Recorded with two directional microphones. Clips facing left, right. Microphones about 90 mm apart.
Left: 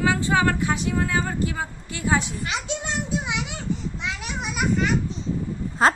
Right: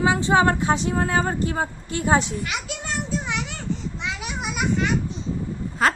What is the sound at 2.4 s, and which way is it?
Speech, 30° left (ahead or behind).